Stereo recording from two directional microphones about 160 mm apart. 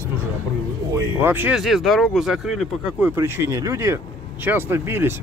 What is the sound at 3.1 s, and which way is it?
Speech, 15° right (ahead or behind).